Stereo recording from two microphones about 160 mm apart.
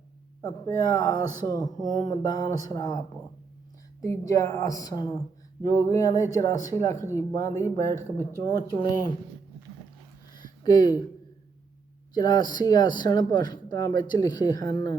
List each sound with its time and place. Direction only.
0.4 s speech: 20° left (ahead or behind)
4.0 s speech: 20° left (ahead or behind)
10.3 s a sound: 25° left (ahead or behind)
12.1 s speech: 25° left (ahead or behind)